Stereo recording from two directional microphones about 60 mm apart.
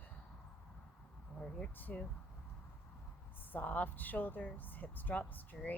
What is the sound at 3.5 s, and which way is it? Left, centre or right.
A woman's voice, left.